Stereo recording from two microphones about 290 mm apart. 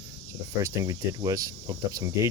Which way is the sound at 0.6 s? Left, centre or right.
Centre.